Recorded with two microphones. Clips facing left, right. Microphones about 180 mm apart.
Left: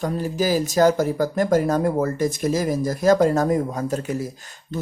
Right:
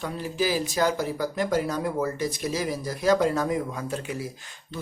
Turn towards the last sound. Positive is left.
turn(degrees=45)  # may be behind; listen again after turning